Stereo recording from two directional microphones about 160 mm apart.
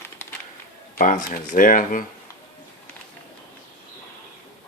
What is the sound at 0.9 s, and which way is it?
Speech, 55° left (ahead or behind).